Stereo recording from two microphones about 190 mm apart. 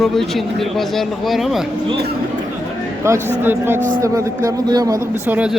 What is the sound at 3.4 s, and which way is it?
A man's voice, 10° right (ahead or behind).